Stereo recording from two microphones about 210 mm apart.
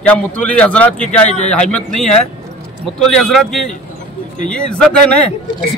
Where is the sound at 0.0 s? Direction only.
5° left (ahead or behind).